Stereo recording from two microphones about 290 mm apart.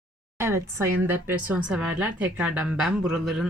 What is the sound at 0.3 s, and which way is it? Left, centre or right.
Speech, centre.